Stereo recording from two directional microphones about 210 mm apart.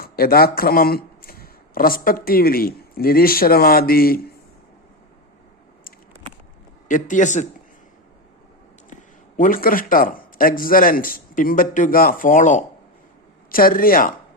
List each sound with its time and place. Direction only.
0.0 s speech: 45° left (ahead or behind)
6.8 s speech: 40° left (ahead or behind)
8.9 s speech: 35° left (ahead or behind)